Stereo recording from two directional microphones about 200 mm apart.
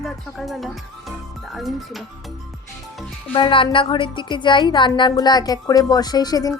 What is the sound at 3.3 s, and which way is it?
Speech, 25° left (ahead or behind).